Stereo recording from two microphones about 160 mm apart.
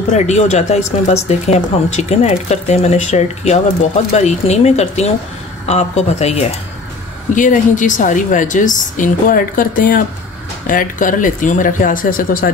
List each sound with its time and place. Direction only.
0.1 s a woman's voice: 45° left (ahead or behind)
7.3 s a woman's voice: 55° left (ahead or behind)